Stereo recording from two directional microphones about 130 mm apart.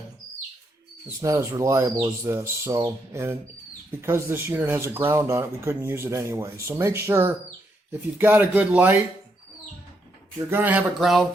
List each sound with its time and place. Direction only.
1.2 s speech: 25° right (ahead or behind)
10.3 s speech: 15° right (ahead or behind)
11.0 s speech: centre (ahead or behind)